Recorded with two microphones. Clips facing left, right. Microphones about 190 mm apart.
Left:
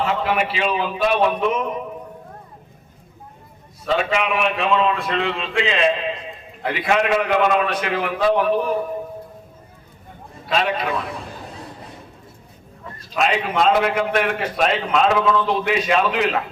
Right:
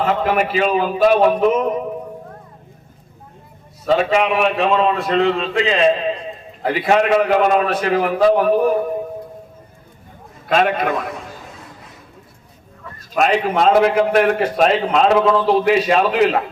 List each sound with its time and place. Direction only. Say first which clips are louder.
0.0 s a man's voice: right 3 dB; 45° right (ahead or behind)
3.8 s a man's voice: right 5 dB; 40° right (ahead or behind)
10.4 s a man's voice: right 5 dB; 50° right (ahead or behind)
13.1 s a man's voice: right 4 dB; 45° right (ahead or behind)